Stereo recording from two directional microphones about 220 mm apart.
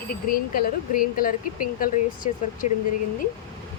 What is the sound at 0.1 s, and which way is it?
Speech, 40° left (ahead or behind).